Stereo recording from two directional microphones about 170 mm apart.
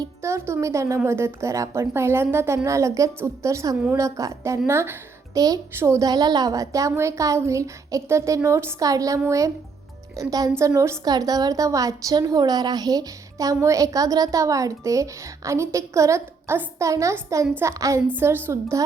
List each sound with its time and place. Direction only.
0.0 s a woman's voice: 15° right (ahead or behind)